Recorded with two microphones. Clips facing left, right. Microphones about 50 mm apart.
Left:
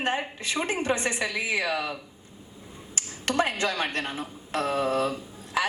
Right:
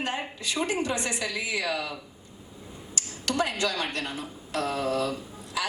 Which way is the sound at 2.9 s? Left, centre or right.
Left.